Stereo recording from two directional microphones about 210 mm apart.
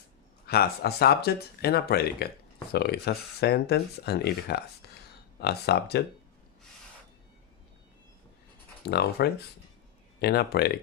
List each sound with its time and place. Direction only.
0.4 s speech: 50° left (ahead or behind)
8.8 s speech: 50° left (ahead or behind)